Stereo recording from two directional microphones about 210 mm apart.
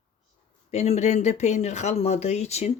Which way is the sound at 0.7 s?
30° left (ahead or behind).